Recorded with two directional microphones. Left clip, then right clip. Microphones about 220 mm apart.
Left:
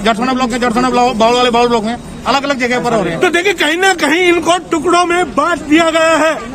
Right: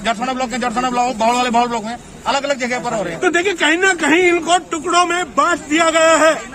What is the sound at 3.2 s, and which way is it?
Speech, 35° left (ahead or behind).